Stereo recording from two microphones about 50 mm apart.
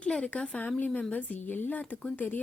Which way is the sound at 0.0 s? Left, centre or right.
Left.